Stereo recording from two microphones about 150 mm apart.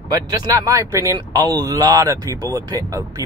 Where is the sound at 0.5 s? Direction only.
20° right (ahead or behind).